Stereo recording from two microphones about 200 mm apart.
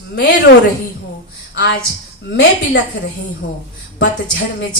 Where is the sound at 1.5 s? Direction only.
65° left (ahead or behind).